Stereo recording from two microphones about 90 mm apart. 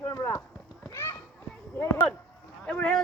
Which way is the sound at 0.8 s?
30° left (ahead or behind).